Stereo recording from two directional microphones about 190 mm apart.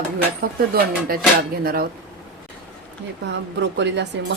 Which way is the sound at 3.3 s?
65° right (ahead or behind).